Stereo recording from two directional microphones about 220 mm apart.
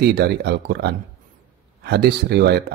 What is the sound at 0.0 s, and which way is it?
A man's voice, 50° right (ahead or behind).